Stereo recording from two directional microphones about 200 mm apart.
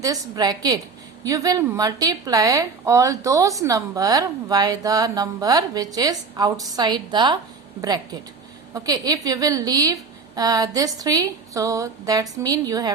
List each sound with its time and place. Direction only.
0.0 s a woman's voice: 20° right (ahead or behind)